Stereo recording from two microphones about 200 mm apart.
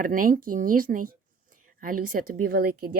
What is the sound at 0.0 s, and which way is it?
Speech, 45° right (ahead or behind).